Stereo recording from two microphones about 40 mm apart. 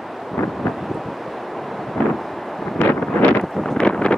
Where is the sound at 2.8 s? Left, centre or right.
Left.